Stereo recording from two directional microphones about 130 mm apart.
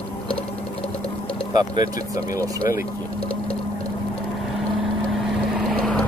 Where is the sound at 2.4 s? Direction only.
25° right (ahead or behind).